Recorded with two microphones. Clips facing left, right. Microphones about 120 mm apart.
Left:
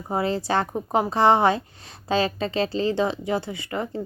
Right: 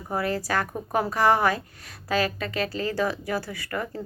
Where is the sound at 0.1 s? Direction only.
25° left (ahead or behind).